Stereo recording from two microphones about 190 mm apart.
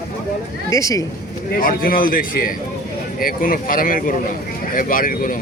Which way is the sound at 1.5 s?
50° left (ahead or behind).